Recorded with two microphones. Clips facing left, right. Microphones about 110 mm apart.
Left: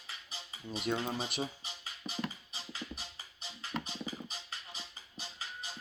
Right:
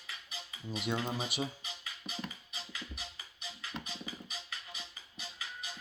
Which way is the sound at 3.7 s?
85° left.